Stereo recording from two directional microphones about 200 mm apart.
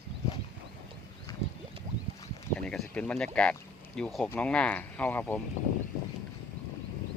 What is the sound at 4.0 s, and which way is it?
Speech, 5° left (ahead or behind).